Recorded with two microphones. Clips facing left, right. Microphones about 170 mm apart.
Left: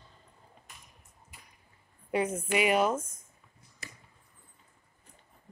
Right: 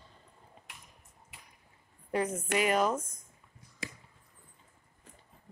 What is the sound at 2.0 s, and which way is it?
Speech, 10° left (ahead or behind).